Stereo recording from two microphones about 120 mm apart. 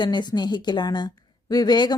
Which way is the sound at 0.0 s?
35° left (ahead or behind).